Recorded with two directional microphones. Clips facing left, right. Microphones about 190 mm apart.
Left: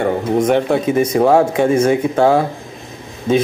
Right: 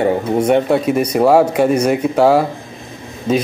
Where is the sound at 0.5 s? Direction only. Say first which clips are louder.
Right 4 dB; 5° right (ahead or behind).